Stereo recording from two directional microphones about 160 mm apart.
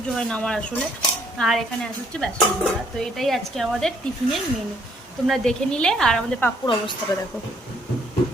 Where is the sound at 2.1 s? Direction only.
5° left (ahead or behind).